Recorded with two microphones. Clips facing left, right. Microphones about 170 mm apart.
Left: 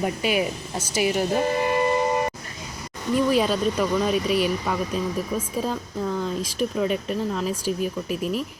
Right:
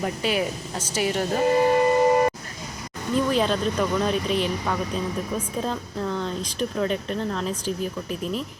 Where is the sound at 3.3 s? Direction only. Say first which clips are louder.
Left 1 dB; 5° left (ahead or behind).